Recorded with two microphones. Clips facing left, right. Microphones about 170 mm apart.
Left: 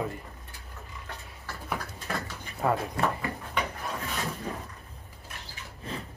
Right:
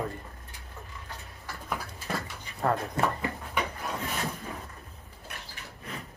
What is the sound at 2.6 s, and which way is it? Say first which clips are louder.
Speech: left 1 dB; 5° left (ahead or behind).